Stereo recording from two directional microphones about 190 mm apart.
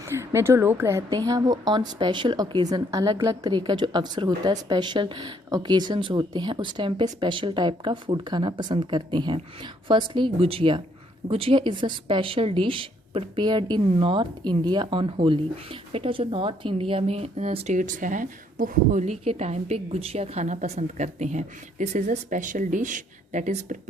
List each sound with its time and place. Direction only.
0.2 s a woman's voice: 15° right (ahead or behind); by 23.9 s 40° right (ahead or behind)